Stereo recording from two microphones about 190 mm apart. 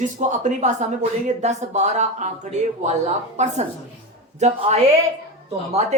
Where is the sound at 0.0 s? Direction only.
40° right (ahead or behind).